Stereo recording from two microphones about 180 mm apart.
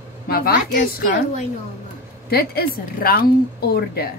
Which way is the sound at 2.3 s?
60° left (ahead or behind).